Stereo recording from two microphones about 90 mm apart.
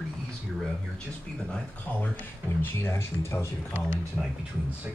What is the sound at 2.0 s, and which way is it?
Speech, 20° left (ahead or behind).